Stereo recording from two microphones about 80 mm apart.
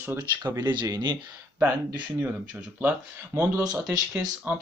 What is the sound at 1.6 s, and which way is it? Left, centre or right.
Speech, centre.